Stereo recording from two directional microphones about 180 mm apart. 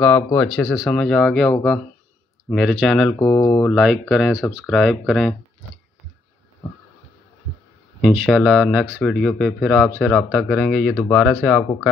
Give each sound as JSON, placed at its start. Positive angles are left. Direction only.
{"t": 0.0, "sound": "speech", "side_deg": 5}
{"t": 2.5, "sound": "speech", "side_deg": 0}
{"t": 3.2, "sound": "mantra", "side_deg": 20}
{"t": 3.5, "sound": "speech", "side_deg": 5}
{"t": 8.0, "sound": "speech", "side_deg": 0}